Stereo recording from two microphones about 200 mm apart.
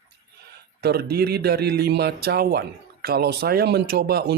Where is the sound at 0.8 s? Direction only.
55° right (ahead or behind).